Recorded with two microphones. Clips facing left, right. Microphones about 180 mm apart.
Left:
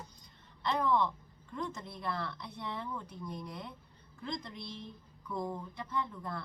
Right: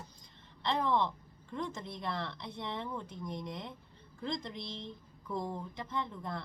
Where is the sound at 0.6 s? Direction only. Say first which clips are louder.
Left 1 dB; 25° right (ahead or behind).